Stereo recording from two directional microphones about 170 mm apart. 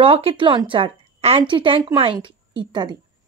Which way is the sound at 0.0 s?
35° right (ahead or behind).